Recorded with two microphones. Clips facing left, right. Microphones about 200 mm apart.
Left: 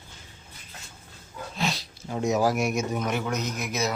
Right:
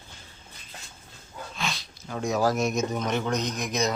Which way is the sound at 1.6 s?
35° left (ahead or behind).